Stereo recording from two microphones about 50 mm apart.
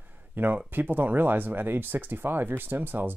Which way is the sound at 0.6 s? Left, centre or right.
Right.